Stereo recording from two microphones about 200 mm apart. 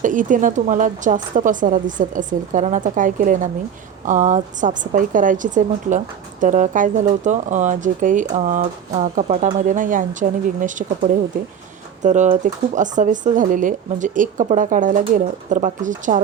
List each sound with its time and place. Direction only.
0.0 s a woman's voice: 40° right (ahead or behind)